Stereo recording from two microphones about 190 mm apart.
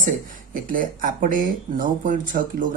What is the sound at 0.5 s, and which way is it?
Speech, 45° right (ahead or behind).